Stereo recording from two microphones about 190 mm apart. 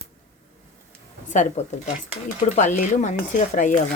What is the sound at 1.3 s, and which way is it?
Speech, 40° left (ahead or behind).